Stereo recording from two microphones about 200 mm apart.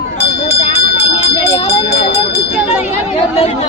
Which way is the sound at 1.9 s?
55° left (ahead or behind).